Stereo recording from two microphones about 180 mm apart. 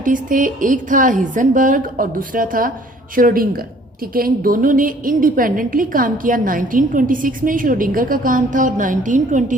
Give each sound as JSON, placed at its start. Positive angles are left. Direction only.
{"t": 0.0, "sound": "a woman's voice", "side_deg": -50}